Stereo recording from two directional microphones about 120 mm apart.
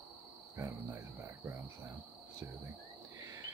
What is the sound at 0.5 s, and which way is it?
Speech, 25° right (ahead or behind).